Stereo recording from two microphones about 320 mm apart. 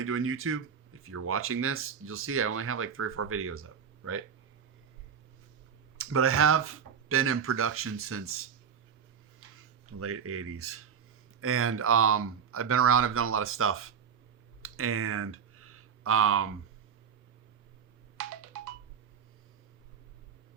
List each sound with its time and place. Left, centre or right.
0.0 s speech: right
6.0 s speech: right
9.6 s speech: right
14.6 s a sound: right